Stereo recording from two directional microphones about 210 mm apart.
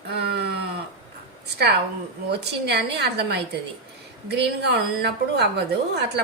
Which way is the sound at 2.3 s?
55° right (ahead or behind).